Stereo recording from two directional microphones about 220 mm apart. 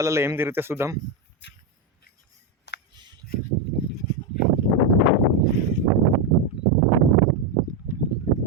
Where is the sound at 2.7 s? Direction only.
50° left (ahead or behind).